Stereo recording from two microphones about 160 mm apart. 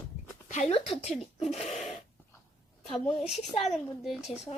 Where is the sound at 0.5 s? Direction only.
40° left (ahead or behind).